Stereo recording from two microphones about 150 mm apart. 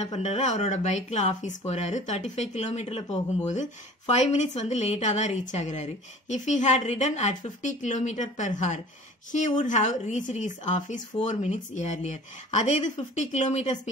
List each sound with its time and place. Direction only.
0.0 s speech: 50° left (ahead or behind)